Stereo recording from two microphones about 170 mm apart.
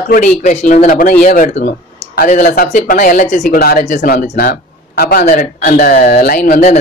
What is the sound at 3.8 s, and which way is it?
Speech, 50° left (ahead or behind).